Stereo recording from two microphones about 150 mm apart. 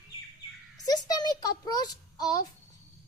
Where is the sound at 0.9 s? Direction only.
25° left (ahead or behind).